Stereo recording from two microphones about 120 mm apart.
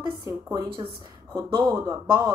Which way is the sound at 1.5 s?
30° right (ahead or behind).